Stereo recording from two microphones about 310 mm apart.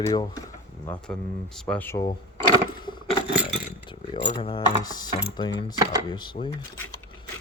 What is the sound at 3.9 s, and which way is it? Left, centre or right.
Speech, centre.